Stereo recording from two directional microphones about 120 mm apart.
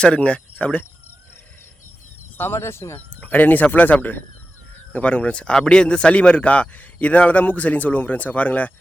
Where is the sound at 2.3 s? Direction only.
20° left (ahead or behind).